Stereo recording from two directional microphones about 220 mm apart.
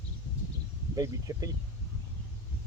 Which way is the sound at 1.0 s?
15° right (ahead or behind).